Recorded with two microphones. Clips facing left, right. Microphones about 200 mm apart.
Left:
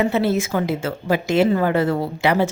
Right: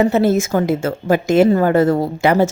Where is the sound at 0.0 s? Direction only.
45° right (ahead or behind).